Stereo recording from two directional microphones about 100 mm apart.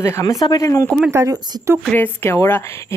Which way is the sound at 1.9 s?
20° left (ahead or behind).